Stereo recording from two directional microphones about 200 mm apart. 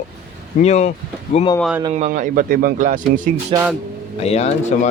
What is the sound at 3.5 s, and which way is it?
Speech, 25° right (ahead or behind).